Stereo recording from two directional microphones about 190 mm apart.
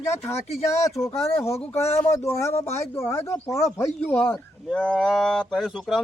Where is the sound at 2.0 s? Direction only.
15° left (ahead or behind).